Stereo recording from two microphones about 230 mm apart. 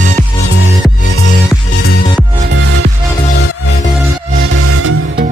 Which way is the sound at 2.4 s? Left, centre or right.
Right.